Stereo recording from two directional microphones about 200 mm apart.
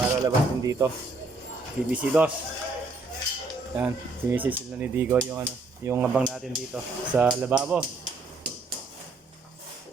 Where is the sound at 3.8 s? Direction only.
10° right (ahead or behind).